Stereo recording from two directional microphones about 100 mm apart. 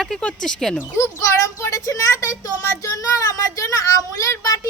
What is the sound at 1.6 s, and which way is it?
A woman's voice, 35° left (ahead or behind).